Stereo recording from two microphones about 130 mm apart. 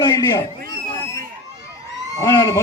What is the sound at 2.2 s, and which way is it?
Speech, 25° left (ahead or behind).